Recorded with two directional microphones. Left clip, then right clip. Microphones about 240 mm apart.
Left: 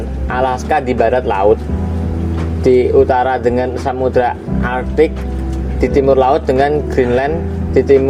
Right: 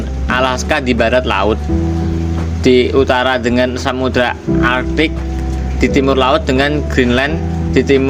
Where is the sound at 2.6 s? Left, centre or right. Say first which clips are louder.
Left 1 dB; right.